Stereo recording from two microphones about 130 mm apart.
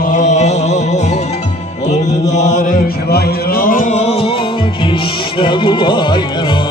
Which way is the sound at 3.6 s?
90° left.